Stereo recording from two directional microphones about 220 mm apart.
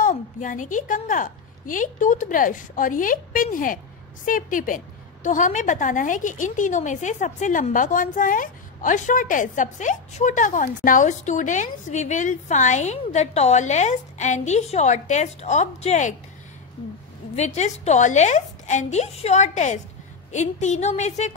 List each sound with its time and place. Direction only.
0.0 s a woman's voice: 35° left (ahead or behind)
17.4 s a woman's voice: 30° left (ahead or behind)